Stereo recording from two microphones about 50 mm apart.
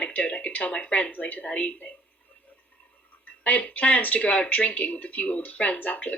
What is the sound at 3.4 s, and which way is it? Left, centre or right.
Speech, left.